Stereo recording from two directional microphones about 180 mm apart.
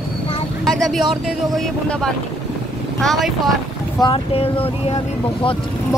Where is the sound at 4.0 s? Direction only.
30° left (ahead or behind).